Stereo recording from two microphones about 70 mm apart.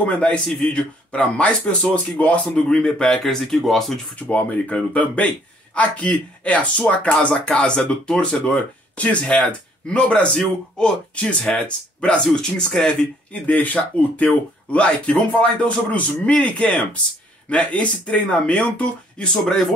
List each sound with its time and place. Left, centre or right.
0.0 s speech: centre
4.3 s speech: left
13.3 s speech: left